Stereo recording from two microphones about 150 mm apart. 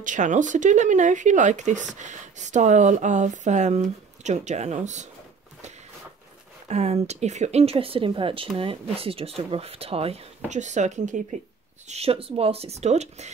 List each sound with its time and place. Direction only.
0.0 s speech: 55° right (ahead or behind)
6.7 s speech: 45° right (ahead or behind)
11.9 s speech: 40° right (ahead or behind)